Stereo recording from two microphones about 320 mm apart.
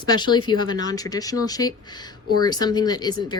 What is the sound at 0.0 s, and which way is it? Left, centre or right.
Speech, centre.